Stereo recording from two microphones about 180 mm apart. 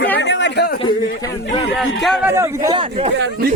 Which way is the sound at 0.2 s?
80° left.